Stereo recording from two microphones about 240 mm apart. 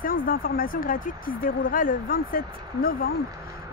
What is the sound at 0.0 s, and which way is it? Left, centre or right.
Speech, left.